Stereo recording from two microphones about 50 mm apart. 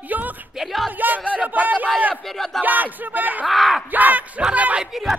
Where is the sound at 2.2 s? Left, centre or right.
Centre.